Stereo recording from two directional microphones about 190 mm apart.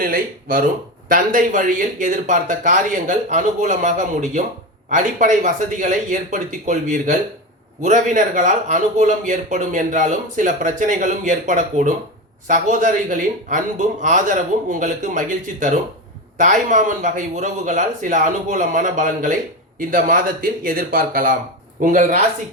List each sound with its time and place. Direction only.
0.0 s speech: 45° right (ahead or behind)